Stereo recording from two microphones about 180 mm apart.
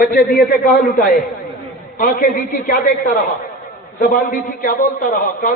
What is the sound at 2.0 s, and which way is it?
A man's voice, 50° left (ahead or behind).